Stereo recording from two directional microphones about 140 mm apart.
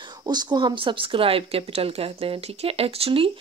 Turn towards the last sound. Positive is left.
turn(degrees=-40)  # may be behind; listen again after turning